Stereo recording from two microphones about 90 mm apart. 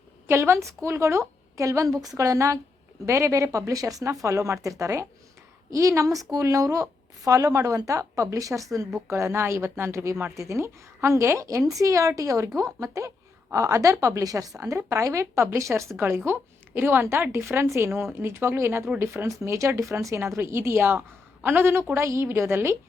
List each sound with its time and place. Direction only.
0.3 s a woman's voice: 30° right (ahead or behind)